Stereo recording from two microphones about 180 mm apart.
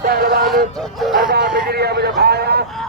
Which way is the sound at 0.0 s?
55° right (ahead or behind).